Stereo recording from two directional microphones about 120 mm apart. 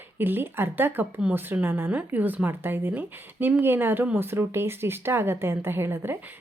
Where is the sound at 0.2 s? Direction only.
15° right (ahead or behind).